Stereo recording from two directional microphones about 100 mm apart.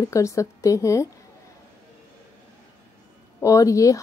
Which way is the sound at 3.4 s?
35° left (ahead or behind).